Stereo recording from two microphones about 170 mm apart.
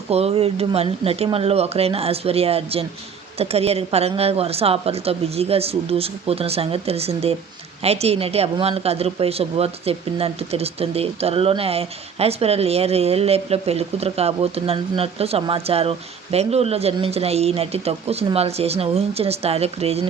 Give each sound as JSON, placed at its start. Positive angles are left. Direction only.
{"t": 0.1, "sound": "speech", "side_deg": -35}